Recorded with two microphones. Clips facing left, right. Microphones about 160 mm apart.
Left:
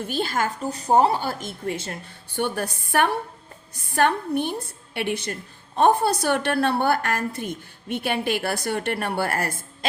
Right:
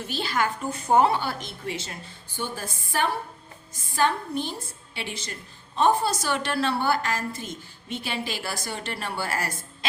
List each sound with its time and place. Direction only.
0.0 s a woman's voice: 50° left (ahead or behind)